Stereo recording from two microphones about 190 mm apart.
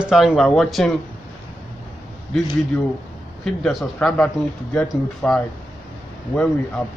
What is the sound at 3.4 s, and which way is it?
Speech, 5° left (ahead or behind).